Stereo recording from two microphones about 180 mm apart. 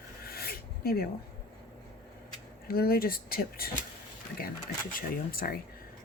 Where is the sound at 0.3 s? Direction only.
55° left (ahead or behind).